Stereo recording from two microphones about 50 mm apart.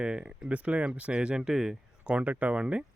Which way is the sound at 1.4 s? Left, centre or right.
Centre.